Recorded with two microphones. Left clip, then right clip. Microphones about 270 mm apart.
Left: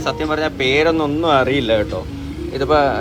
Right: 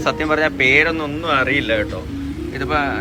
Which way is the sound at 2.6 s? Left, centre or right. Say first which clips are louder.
Left 5 dB; centre.